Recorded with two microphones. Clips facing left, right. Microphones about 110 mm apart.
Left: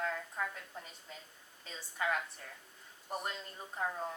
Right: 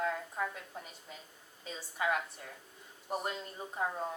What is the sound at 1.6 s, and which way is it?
Speech, 15° right (ahead or behind).